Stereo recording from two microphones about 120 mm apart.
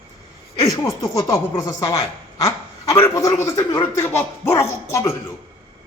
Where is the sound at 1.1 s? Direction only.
30° left (ahead or behind).